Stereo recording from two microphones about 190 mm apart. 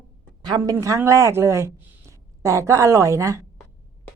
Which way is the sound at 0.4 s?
20° right (ahead or behind).